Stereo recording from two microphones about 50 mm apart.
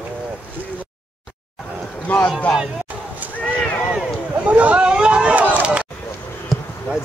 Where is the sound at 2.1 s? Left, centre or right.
Left.